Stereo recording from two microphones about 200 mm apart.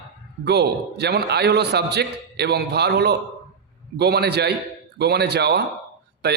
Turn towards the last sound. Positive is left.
turn(degrees=-55)  # may be behind; listen again after turning